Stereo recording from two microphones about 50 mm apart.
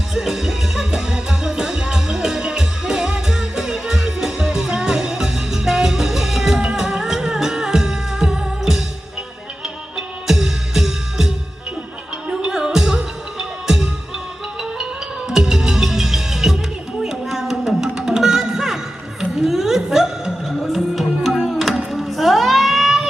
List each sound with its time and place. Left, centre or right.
0.1 s music: centre
10.2 s music: centre
12.3 s music: centre
15.3 s music: centre